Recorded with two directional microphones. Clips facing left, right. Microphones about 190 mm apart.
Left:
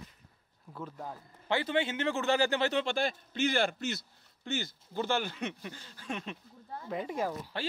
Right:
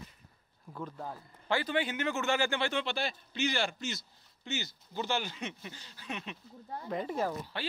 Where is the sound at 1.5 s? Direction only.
25° left (ahead or behind); by 6.3 s 45° left (ahead or behind).